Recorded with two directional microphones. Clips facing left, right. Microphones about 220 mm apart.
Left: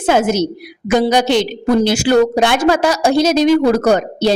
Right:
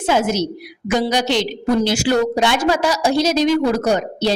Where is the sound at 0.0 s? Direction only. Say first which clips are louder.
Left 4 dB; 50° left (ahead or behind).